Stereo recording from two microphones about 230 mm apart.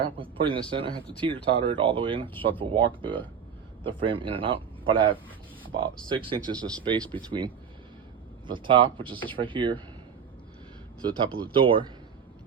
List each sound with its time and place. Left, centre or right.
0.0 s speech: right
11.4 s speech: right